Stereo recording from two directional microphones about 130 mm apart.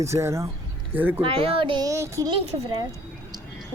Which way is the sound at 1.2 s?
45° right (ahead or behind).